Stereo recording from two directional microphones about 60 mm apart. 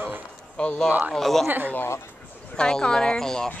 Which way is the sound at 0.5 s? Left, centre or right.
Centre.